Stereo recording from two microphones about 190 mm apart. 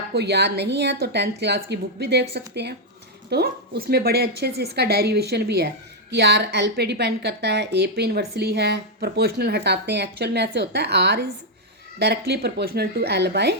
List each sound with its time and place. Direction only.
0.1 s a woman's voice: 60° right (ahead or behind)
3.2 s a woman's voice: 55° right (ahead or behind)